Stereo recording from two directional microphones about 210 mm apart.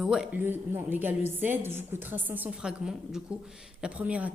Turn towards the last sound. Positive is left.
turn(degrees=-5)  # may be behind; listen again after turning